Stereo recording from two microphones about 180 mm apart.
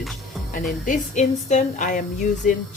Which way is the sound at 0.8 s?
40° left (ahead or behind).